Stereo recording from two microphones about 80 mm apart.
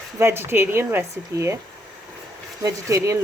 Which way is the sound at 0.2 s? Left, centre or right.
Right.